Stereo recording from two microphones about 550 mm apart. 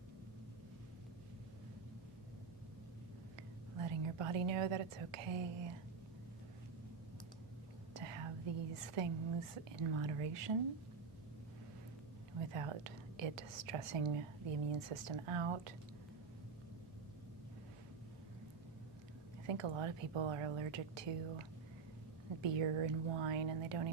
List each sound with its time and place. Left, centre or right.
3.8 s a woman's voice: right
7.9 s whispering: right
8.7 s a woman's voice: right
12.5 s a woman's voice: right
19.5 s a woman's voice: right
22.4 s a woman's voice: right